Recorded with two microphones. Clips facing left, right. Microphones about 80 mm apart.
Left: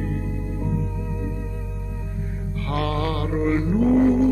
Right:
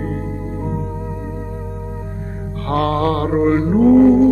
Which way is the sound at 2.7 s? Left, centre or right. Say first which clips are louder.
Right 8 dB; right.